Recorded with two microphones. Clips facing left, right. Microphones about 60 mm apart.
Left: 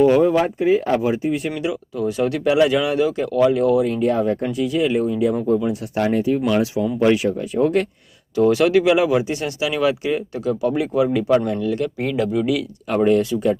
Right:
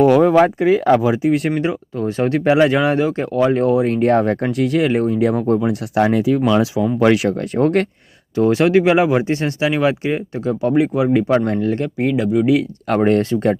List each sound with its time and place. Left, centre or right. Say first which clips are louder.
0.0 s speech: right 3 dB; right
1.2 s speech: right 5 dB; right
1.5 s speech: right 3 dB; right
5.9 s speech: right 4 dB; right
8.4 s speech: right 1 dB; right
11.5 s speech: right 2 dB; right
11.9 s speech: right 4 dB; right
13.0 s speech: right 1 dB; right